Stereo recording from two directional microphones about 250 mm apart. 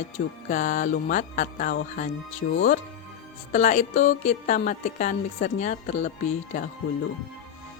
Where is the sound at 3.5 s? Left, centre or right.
Left.